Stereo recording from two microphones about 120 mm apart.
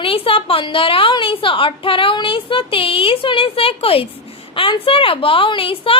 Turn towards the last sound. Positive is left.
turn(degrees=50)  # may be behind; listen again after turning